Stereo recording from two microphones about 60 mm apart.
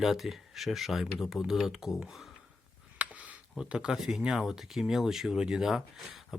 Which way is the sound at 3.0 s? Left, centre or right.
Right.